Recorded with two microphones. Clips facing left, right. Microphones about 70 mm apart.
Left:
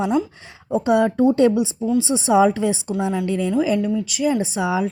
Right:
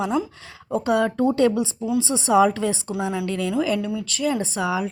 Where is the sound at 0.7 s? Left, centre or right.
Left.